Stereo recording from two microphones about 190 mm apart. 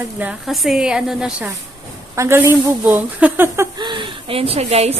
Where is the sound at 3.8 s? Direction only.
25° right (ahead or behind).